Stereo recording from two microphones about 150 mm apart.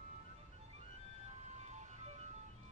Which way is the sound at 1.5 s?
50° right (ahead or behind).